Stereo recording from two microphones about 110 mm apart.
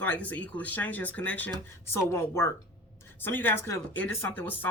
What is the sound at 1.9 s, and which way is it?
A woman's voice, 25° left (ahead or behind).